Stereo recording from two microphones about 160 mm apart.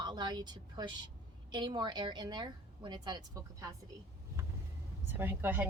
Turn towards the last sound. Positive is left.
turn(degrees=-10)  # may be behind; listen again after turning